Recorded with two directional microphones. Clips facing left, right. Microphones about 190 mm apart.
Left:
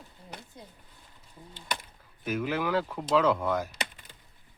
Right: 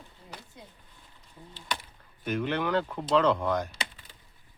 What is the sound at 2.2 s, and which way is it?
Speech, 5° left (ahead or behind).